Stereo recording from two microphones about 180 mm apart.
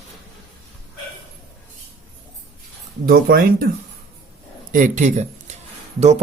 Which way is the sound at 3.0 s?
55° right (ahead or behind).